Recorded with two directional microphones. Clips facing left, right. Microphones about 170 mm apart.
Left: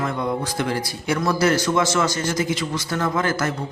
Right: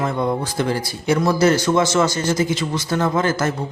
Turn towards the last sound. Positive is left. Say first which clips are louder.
# right 3 dB
turn(degrees=-25)  # may be behind; listen again after turning